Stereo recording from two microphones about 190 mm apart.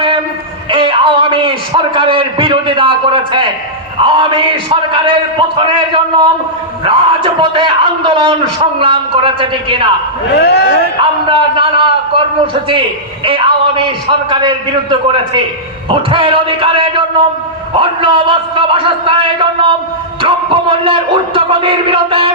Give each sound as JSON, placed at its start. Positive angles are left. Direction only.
{"t": 0.7, "sound": "a man's voice", "side_deg": -25}
{"t": 10.3, "sound": "speech", "side_deg": 65}
{"t": 11.0, "sound": "a man's voice", "side_deg": -25}
{"t": 13.2, "sound": "a man's voice", "side_deg": -30}